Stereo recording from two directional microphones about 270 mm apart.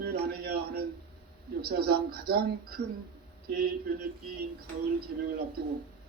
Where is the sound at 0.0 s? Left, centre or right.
Right.